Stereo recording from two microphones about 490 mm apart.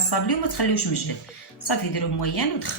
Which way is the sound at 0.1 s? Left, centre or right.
Left.